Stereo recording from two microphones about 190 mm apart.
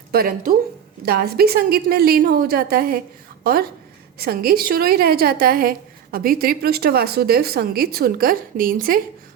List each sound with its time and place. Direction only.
0.1 s a woman's voice: 50° right (ahead or behind)